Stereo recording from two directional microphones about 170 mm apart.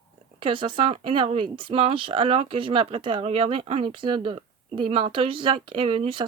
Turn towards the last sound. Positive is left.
turn(degrees=-30)  # may be behind; listen again after turning